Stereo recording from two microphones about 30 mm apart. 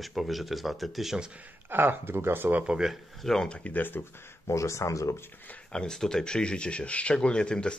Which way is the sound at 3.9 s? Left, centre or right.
Left.